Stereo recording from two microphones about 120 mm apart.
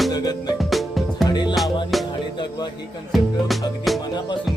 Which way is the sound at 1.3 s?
40° left (ahead or behind).